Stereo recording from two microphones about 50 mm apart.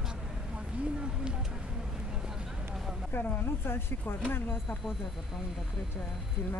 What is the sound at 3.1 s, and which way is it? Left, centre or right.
Speech, left.